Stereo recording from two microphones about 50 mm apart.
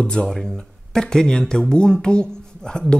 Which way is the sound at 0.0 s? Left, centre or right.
Left.